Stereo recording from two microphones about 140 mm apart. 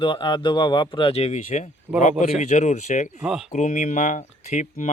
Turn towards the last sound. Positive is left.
turn(degrees=55)  # may be behind; listen again after turning